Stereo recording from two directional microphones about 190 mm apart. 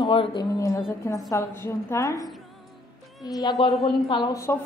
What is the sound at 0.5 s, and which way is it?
A woman's voice, 15° left (ahead or behind).